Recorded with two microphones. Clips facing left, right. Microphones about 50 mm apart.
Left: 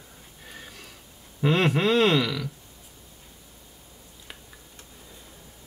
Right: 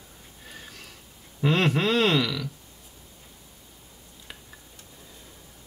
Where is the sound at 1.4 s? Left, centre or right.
Centre.